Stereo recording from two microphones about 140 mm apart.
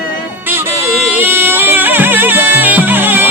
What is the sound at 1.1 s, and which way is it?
Music, 15° right (ahead or behind).